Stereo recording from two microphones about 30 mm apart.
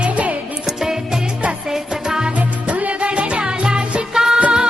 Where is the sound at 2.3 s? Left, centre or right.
Right.